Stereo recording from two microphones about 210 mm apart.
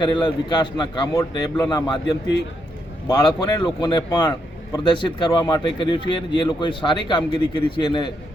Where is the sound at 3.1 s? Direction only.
20° left (ahead or behind).